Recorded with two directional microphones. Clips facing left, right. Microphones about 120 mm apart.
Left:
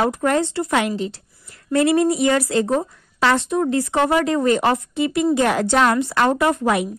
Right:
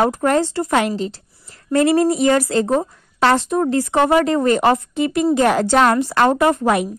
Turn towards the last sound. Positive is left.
turn(degrees=-45)  # may be behind; listen again after turning